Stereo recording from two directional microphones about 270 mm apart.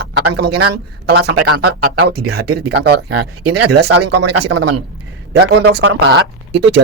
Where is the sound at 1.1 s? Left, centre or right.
Right.